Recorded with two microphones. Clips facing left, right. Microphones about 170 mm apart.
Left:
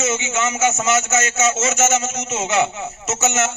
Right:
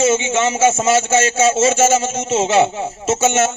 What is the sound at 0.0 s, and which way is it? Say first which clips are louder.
A man's voice: right 6 dB; 25° right (ahead or behind).